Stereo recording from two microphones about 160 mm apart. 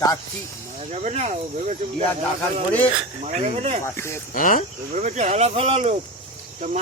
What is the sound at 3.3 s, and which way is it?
Speech, 45° right (ahead or behind).